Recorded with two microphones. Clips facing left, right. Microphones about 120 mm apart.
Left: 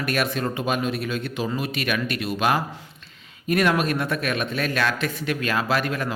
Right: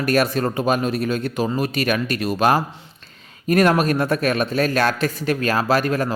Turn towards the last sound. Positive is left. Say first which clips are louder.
# right 5 dB
turn(degrees=-40)  # may be behind; listen again after turning